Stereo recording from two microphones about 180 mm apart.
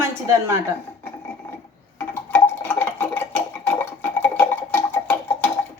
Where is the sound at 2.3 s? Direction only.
10° left (ahead or behind).